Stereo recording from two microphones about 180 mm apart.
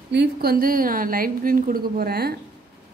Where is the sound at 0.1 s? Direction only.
65° right (ahead or behind).